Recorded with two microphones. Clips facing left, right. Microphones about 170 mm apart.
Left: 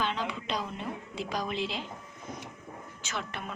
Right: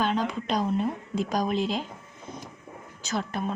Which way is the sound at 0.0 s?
45° right (ahead or behind).